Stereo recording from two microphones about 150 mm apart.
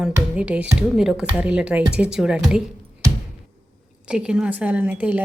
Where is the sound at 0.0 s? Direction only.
5° right (ahead or behind).